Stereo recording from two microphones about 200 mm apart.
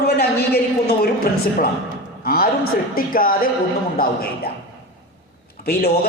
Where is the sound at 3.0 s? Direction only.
45° left (ahead or behind).